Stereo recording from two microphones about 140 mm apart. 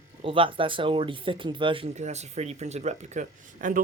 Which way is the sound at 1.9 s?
55° right (ahead or behind).